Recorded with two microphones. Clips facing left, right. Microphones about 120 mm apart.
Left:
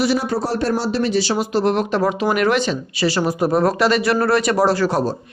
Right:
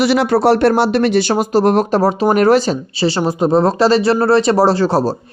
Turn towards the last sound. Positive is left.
turn(degrees=-30)  # may be behind; listen again after turning